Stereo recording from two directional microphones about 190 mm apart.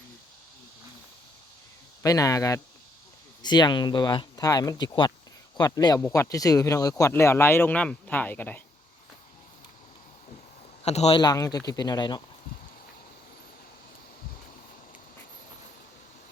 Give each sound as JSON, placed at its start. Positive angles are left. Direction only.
{"t": 2.0, "sound": "speech", "side_deg": 20}
{"t": 10.8, "sound": "speech", "side_deg": 35}
{"t": 11.2, "sound": "speech", "side_deg": 20}